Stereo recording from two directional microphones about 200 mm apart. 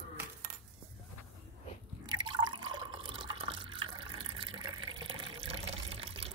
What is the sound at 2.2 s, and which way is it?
Water, 20° right (ahead or behind).